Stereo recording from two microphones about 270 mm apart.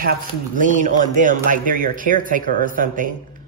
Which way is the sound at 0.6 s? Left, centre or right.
Right.